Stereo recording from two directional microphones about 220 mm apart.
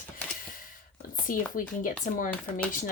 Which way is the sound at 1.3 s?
40° left (ahead or behind).